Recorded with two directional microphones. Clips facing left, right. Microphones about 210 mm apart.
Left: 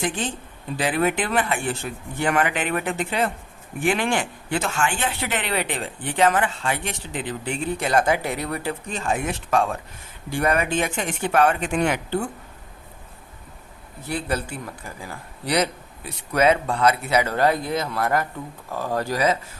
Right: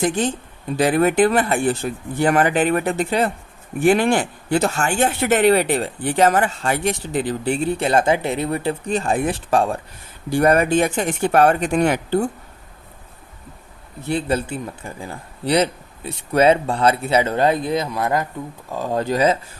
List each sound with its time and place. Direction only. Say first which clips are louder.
0.0 s speech: right 7 dB; 40° right (ahead or behind)
14.0 s speech: right 5 dB; 25° right (ahead or behind)